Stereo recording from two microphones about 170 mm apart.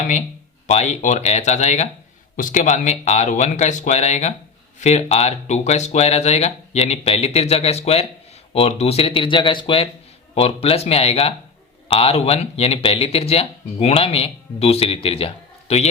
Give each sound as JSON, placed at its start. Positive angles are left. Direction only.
{"t": 0.7, "sound": "speech", "side_deg": 40}